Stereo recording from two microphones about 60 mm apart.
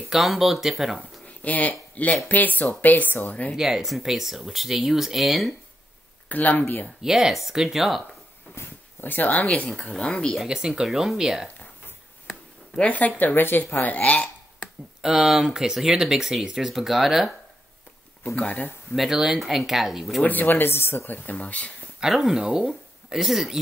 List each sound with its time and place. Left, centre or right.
0.1 s speech: centre
0.9 s speech: left
3.5 s speech: centre
6.2 s speech: left
7.0 s speech: centre
8.5 s speech: left; by 10.3 s centre
10.4 s speech: centre
12.3 s a sound: centre
13.2 s speech: left
15.0 s speech: centre
18.2 s speech: left
18.9 s speech: centre
20.2 s speech: left
22.0 s speech: centre